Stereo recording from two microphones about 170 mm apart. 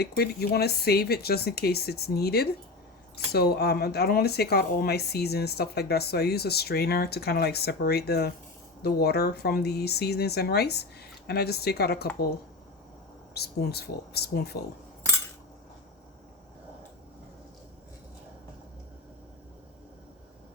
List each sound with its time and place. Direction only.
0.0 s speech: 70° left (ahead or behind)
13.3 s speech: 70° left (ahead or behind)